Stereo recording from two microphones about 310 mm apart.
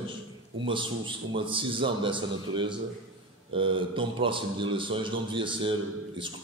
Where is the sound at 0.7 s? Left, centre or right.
Centre.